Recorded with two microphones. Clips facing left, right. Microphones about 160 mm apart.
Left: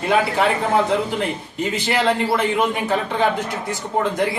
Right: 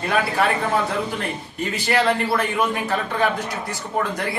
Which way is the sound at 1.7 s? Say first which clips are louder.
Even; 20° left (ahead or behind).